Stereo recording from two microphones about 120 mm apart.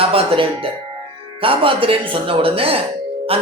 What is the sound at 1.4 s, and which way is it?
Speech, 45° right (ahead or behind).